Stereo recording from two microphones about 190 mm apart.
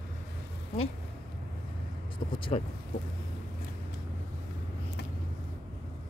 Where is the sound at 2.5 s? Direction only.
40° left (ahead or behind).